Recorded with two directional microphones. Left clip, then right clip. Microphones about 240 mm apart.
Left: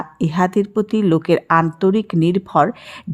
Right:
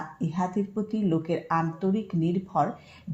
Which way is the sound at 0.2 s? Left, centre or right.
Left.